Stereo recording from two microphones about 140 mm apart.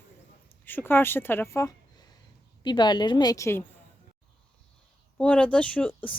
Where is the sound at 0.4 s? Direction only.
15° left (ahead or behind).